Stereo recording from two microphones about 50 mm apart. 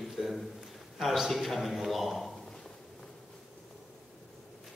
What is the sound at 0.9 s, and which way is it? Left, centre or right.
A man's voice, centre.